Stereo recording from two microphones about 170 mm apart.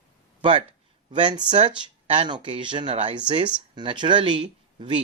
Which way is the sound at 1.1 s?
25° right (ahead or behind).